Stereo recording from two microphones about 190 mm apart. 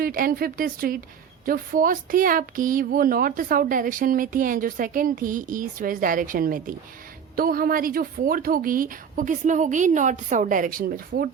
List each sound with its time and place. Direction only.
0.0 s a woman's voice: 50° right (ahead or behind)